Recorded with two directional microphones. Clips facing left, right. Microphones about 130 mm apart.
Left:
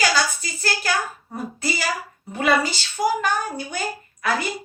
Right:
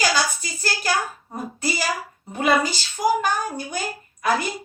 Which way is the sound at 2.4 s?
20° right (ahead or behind).